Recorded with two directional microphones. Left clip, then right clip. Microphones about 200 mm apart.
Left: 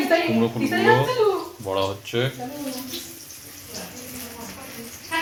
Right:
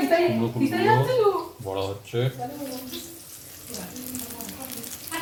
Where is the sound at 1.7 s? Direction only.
5° left (ahead or behind).